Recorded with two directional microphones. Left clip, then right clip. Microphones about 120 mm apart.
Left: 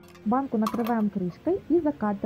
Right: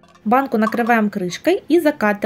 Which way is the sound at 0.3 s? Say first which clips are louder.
Right 10 dB; 40° right (ahead or behind).